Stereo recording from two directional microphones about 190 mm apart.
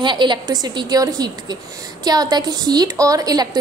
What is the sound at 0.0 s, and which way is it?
A woman's voice, 25° right (ahead or behind).